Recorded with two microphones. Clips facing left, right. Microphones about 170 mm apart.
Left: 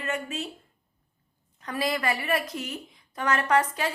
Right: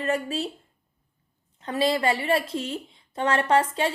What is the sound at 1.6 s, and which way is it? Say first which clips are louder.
A woman's voice: right 5 dB; 25° right (ahead or behind).